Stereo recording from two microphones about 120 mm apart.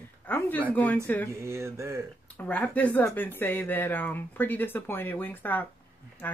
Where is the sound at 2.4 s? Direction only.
10° left (ahead or behind).